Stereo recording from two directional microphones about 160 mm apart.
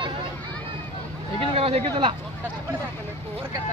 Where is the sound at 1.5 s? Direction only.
35° right (ahead or behind).